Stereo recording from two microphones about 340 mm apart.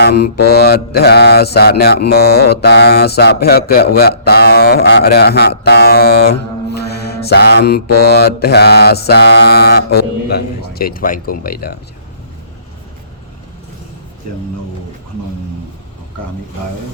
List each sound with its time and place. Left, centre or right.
0.0 s mantra: left